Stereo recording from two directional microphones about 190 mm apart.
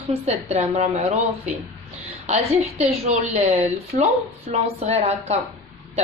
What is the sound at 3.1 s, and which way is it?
A woman's voice, 35° right (ahead or behind).